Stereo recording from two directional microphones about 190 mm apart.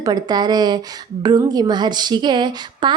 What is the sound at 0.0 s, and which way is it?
A woman's voice, 20° right (ahead or behind).